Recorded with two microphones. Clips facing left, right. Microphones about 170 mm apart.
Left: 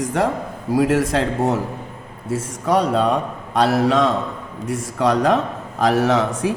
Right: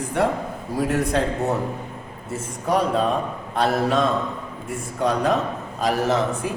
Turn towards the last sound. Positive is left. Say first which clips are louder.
# left 3 dB
turn(degrees=90)